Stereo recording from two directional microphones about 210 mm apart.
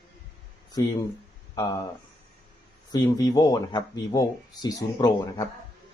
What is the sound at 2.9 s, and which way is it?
Speech, 20° left (ahead or behind).